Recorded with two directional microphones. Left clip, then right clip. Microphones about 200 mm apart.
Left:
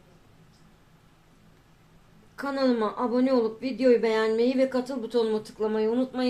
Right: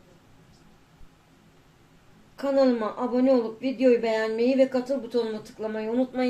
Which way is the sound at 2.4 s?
30° left (ahead or behind).